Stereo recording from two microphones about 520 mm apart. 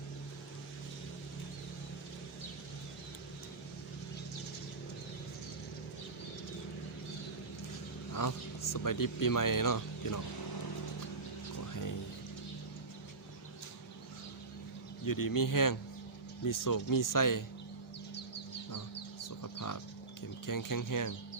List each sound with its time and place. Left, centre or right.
8.1 s speech: left
11.5 s music: left
15.0 s speech: left
19.4 s a sound: left
20.5 s speech: left